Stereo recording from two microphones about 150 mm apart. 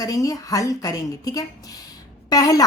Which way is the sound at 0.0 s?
25° left (ahead or behind).